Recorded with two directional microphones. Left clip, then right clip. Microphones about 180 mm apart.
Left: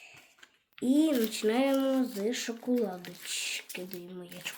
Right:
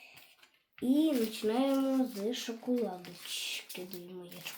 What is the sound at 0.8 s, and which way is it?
Speech, 10° left (ahead or behind).